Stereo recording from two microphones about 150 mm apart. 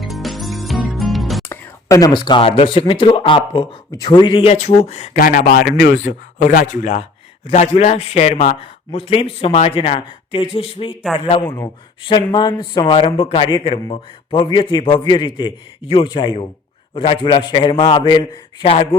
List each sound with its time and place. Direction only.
0.0 s music: centre (ahead or behind)
1.5 s speech: 20° left (ahead or behind); by 5.1 s 45° left (ahead or behind)
5.1 s speech: 65° left (ahead or behind); by 6.0 s 85° left
6.0 s speech: 55° left (ahead or behind)
8.5 s speech: 40° left (ahead or behind)
11.4 s speech: 15° left (ahead or behind)
12.0 s speech: 30° left (ahead or behind)